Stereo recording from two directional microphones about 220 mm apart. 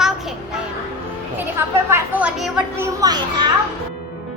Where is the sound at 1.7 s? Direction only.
10° right (ahead or behind).